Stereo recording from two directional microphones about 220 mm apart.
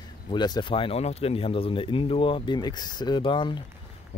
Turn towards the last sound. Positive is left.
turn(degrees=20)  # may be behind; listen again after turning